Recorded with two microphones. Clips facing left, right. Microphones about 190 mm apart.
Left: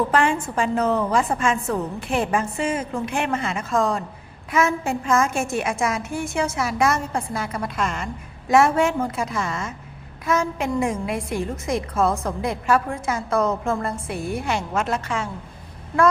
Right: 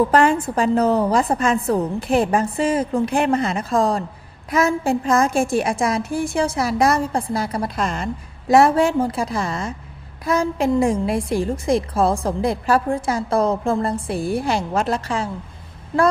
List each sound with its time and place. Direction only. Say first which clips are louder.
0.1 s a woman's voice: right 4 dB; 40° right (ahead or behind)